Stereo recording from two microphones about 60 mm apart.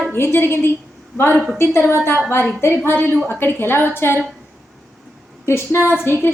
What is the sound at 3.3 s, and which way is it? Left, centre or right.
Speech, left.